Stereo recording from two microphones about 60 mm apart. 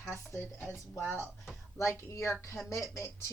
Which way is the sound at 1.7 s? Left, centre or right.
Left.